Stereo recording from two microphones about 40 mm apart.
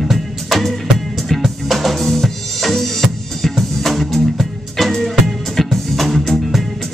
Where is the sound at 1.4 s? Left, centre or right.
Centre.